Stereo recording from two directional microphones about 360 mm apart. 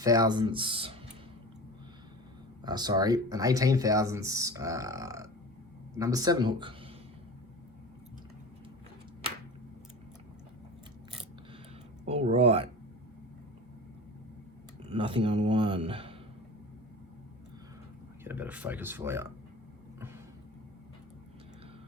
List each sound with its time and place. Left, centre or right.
0.0 s speech: centre
2.6 s speech: centre
12.0 s speech: centre
14.8 s speech: centre
18.3 s speech: centre